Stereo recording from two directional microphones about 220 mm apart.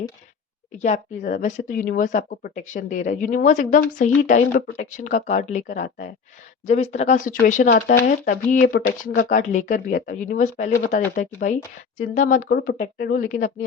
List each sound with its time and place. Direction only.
0.8 s speech: 35° left (ahead or behind)